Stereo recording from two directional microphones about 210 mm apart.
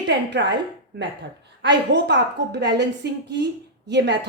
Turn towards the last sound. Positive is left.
turn(degrees=-55)  # may be behind; listen again after turning